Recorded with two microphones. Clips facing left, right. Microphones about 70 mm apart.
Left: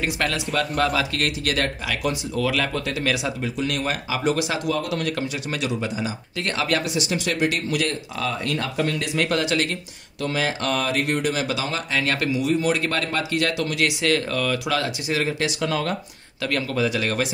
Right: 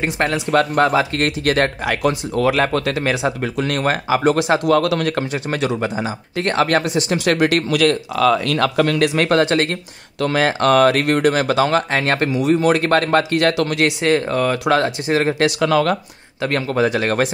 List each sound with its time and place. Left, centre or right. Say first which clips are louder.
0.0 s speech: right 5 dB; right
0.5 s speech: right 10 dB; right
0.8 s speech: right 6 dB; right
3.5 s speech: right 6 dB; right
4.7 s speech: right 8 dB; right
10.2 s speech: right 8 dB; right
15.6 s speech: right 9 dB; right
16.3 s speech: right 5 dB; right